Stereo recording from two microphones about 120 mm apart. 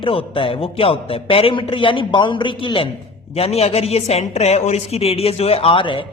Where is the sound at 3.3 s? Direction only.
60° left (ahead or behind).